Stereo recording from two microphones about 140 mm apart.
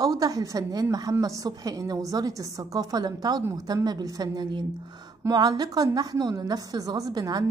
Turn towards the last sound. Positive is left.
turn(degrees=-25)  # may be behind; listen again after turning